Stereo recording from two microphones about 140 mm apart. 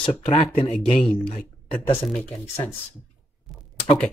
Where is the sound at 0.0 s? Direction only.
45° left (ahead or behind).